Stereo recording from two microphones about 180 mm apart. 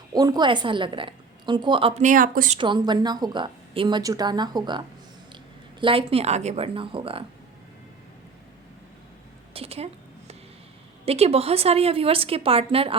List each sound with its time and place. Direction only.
0.1 s a woman's voice: 20° right (ahead or behind); by 2.6 s 50° right (ahead or behind)
2.6 s a woman's voice: 25° right (ahead or behind)
9.5 s a sound: 35° right (ahead or behind)
11.0 s a woman's voice: 35° right (ahead or behind)